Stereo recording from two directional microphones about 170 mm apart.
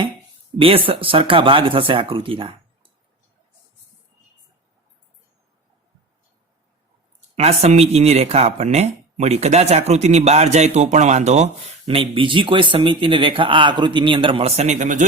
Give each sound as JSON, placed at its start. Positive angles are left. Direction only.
{"t": 0.5, "sound": "speech", "side_deg": -35}
{"t": 7.3, "sound": "speech", "side_deg": -40}